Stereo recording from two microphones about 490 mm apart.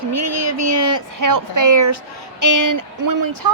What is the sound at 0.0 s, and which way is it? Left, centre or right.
A woman's voice, right.